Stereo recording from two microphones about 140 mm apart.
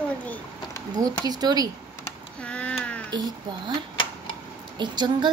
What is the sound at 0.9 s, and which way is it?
Speech, 30° right (ahead or behind).